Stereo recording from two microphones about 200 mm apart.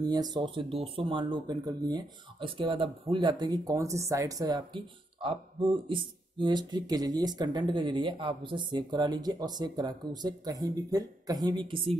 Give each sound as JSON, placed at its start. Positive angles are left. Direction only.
{"t": 0.0, "sound": "speech", "side_deg": -20}